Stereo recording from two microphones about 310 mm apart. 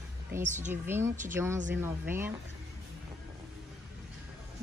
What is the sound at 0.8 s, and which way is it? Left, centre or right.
Speech, centre.